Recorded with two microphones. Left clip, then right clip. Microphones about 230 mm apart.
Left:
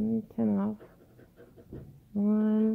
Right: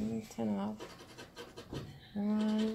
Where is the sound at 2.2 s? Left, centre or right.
Left.